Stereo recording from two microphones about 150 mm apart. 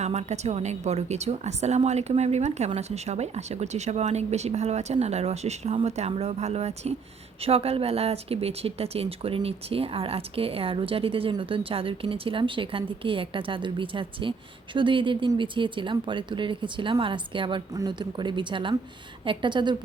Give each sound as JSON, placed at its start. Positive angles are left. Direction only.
{"t": 0.0, "sound": "a woman's voice", "side_deg": -45}